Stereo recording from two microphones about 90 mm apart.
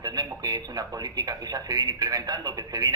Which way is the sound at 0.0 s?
45° right (ahead or behind).